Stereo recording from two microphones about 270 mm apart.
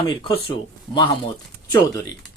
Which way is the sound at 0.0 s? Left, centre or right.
Centre.